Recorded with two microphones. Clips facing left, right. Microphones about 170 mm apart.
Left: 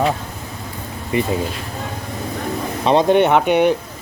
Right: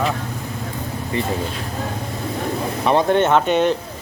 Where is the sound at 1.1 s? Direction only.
15° left (ahead or behind).